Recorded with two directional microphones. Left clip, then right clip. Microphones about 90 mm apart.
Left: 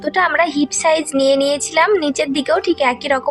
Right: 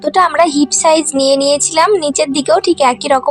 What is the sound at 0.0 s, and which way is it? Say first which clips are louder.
Speech: right 5 dB; 35° right (ahead or behind).